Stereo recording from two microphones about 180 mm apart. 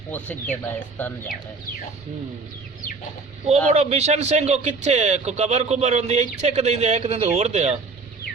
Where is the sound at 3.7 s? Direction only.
35° right (ahead or behind).